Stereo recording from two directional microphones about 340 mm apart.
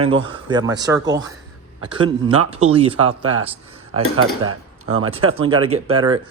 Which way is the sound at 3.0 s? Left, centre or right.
Right.